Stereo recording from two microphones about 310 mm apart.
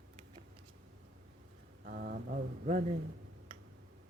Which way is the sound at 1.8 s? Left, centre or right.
Right.